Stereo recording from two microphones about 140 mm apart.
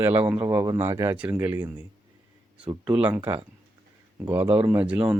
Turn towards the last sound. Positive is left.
turn(degrees=-10)  # may be behind; listen again after turning